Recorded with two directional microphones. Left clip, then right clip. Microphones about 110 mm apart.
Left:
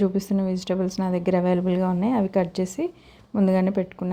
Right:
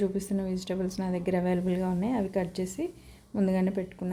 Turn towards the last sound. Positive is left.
turn(degrees=40)  # may be behind; listen again after turning